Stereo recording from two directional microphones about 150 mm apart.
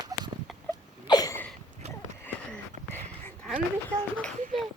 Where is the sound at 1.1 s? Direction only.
25° left (ahead or behind).